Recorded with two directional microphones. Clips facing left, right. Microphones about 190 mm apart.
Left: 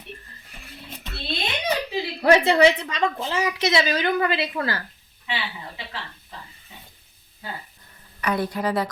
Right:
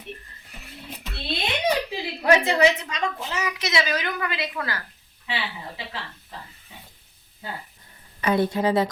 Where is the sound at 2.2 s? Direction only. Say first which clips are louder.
Left 3 dB; 30° left (ahead or behind).